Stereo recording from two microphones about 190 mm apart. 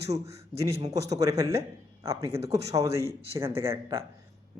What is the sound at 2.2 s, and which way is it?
Speech, 30° right (ahead or behind).